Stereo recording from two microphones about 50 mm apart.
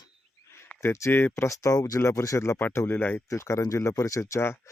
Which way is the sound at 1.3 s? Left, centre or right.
Left.